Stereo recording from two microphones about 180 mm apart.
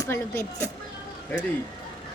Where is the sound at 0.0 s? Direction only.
15° left (ahead or behind).